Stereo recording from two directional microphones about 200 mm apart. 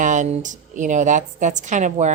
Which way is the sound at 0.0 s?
40° right (ahead or behind).